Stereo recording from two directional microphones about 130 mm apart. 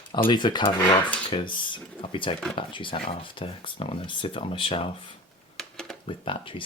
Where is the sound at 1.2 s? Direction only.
40° left (ahead or behind).